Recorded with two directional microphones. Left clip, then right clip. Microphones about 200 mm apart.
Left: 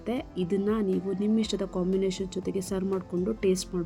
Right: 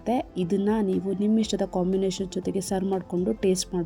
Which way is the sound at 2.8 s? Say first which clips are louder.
Right 3 dB; centre (ahead or behind).